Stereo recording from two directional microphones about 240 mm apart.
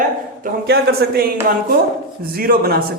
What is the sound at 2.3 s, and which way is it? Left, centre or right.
Speech, right.